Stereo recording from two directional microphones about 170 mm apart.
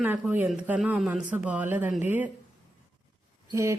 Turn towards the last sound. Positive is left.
turn(degrees=-15)  # may be behind; listen again after turning